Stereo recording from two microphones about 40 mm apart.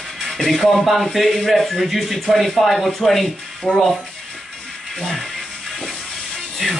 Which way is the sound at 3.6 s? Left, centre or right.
Left.